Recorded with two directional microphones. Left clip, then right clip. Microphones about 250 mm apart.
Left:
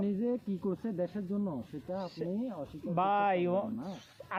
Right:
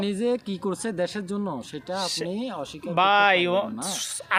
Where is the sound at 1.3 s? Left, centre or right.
Right.